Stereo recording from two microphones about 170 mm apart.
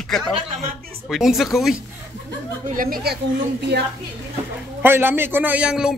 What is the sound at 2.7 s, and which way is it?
Speech, 55° right (ahead or behind).